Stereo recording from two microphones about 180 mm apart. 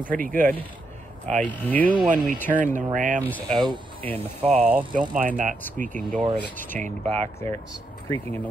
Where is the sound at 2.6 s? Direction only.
45° right (ahead or behind).